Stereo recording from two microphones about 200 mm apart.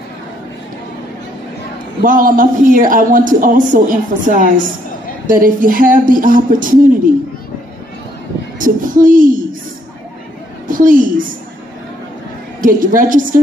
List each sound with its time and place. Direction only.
2.0 s a man's voice: 45° right (ahead or behind)
8.5 s a man's voice: 40° right (ahead or behind)
10.7 s a woman's voice: 40° right (ahead or behind)
12.6 s a man's voice: 45° right (ahead or behind)